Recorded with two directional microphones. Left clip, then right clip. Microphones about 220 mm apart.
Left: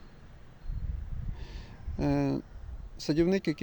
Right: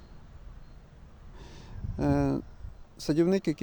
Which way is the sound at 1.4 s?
10° right (ahead or behind).